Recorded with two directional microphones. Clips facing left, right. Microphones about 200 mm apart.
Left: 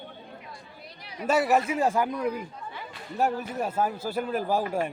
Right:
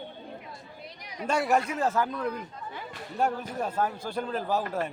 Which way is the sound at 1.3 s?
Centre (ahead or behind).